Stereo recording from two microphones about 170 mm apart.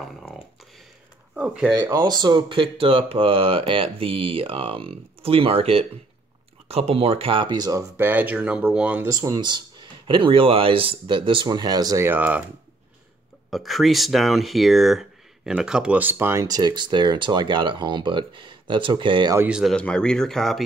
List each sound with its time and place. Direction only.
0.0 s typing: centre (ahead or behind)
1.3 s speech: 5° right (ahead or behind)
1.8 s speech: 20° right (ahead or behind)
8.0 s speech: 10° right (ahead or behind)
13.5 s speech: centre (ahead or behind); by 19.3 s 30° right (ahead or behind)
19.3 s speech: 5° right (ahead or behind)